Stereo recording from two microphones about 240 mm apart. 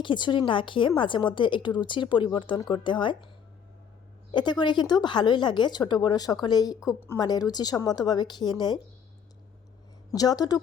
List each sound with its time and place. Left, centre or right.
0.0 s a woman's voice: centre
4.3 s speech: centre
10.1 s speech: centre